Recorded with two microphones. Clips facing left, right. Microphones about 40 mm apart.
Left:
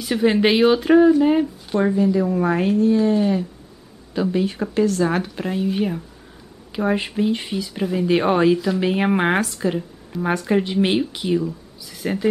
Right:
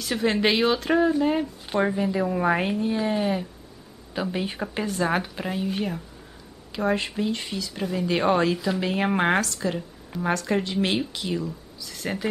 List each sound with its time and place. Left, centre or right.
0.0 s speech: centre
1.7 s speech: centre
5.0 s speech: centre
8.8 s speech: centre